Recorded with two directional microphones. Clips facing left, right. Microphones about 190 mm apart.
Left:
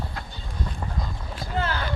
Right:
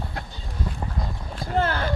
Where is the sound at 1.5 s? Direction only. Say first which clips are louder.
Right 4 dB; 50° right (ahead or behind).